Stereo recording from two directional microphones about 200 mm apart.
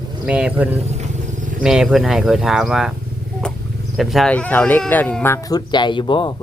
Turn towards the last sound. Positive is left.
turn(degrees=25)  # may be behind; listen again after turning